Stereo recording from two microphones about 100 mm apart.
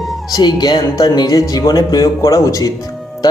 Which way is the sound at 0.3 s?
45° left (ahead or behind).